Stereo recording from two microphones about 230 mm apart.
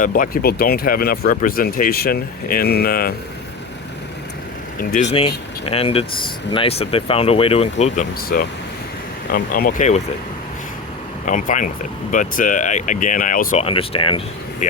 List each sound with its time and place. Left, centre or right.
0.0 s speech: left
4.8 s speech: left
5.6 s speech: left
11.3 s speech: left